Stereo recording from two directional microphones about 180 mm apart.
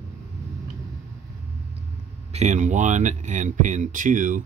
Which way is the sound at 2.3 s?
40° right (ahead or behind).